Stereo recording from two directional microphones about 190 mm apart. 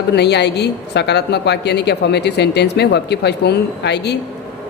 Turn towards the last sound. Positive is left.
turn(degrees=60)  # may be behind; listen again after turning